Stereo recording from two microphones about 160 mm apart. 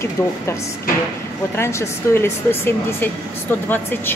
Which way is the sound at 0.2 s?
15° left (ahead or behind).